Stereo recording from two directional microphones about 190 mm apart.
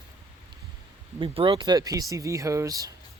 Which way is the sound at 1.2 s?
25° right (ahead or behind).